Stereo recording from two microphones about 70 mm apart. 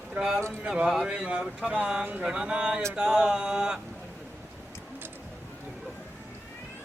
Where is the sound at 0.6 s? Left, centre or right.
Centre.